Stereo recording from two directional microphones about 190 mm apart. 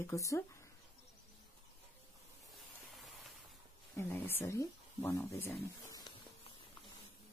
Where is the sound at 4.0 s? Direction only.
10° left (ahead or behind).